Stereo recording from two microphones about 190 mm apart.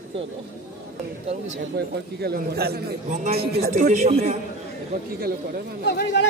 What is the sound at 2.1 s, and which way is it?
Speech, 55° right (ahead or behind).